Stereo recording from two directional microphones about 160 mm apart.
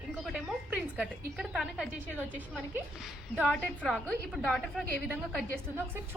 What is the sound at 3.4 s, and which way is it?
A woman's voice, 5° left (ahead or behind).